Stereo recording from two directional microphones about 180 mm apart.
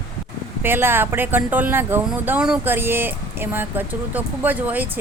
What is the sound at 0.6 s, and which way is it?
Speech, 10° right (ahead or behind).